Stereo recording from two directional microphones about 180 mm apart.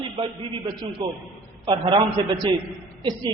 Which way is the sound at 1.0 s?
25° right (ahead or behind).